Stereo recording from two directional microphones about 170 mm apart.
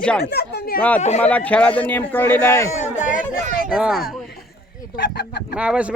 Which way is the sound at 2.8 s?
45° left (ahead or behind).